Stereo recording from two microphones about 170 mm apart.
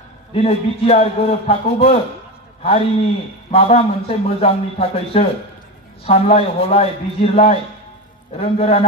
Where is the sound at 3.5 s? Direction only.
35° left (ahead or behind).